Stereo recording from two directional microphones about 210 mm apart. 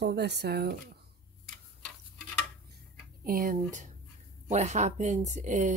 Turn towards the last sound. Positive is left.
turn(degrees=-35)  # may be behind; listen again after turning